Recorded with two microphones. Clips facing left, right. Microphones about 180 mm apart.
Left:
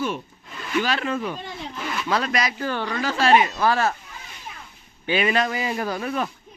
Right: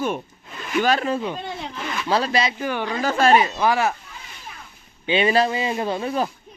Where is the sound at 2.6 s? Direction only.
15° right (ahead or behind).